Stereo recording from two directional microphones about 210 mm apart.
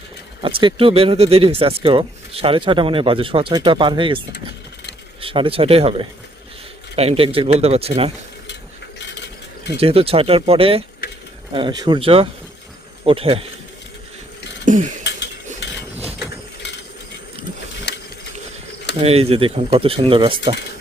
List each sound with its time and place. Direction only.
0.4 s speech: 25° right (ahead or behind)
5.2 s speech: 25° right (ahead or behind)
9.7 s speech: 30° right (ahead or behind)
14.6 s a sound: 40° right (ahead or behind)
17.9 s ratchet: 55° left (ahead or behind)
18.9 s speech: 30° right (ahead or behind)